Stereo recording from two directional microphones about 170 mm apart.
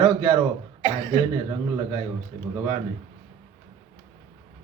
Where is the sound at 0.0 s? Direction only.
20° right (ahead or behind).